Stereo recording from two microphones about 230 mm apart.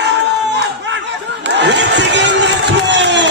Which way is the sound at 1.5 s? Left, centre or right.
Right.